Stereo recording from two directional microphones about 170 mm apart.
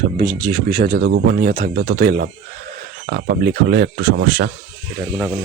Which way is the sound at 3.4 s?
55° right (ahead or behind).